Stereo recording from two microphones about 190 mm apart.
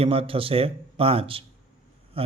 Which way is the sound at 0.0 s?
30° right (ahead or behind).